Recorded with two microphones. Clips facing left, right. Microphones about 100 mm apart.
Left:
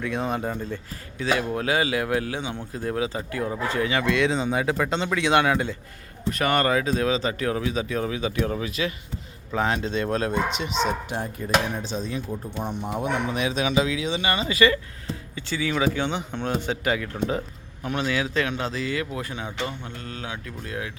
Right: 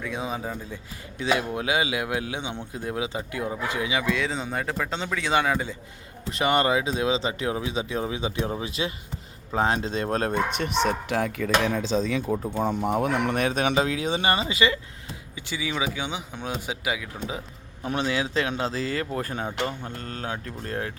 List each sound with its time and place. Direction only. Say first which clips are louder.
0.0 s speech: left 4 dB; 5° right (ahead or behind)
1.2 s speech: left 1 dB; 20° right (ahead or behind); by 5.7 s centre (ahead or behind)
6.3 s speech: even; 20° right (ahead or behind); by 10.7 s 40° right (ahead or behind)
10.8 s speech: right 2 dB; 80° right
12.5 s speech: right 4 dB; 65° right (ahead or behind)
13.4 s speech: left 2 dB; 50° right (ahead or behind)
14.5 s speech: left 4 dB; 15° right (ahead or behind)
17.8 s speech: even; 25° right (ahead or behind)